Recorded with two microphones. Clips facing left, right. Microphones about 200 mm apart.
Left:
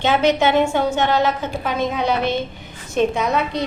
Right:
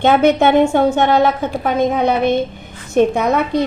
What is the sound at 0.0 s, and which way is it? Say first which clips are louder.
A woman's voice: right 5 dB; 55° right (ahead or behind).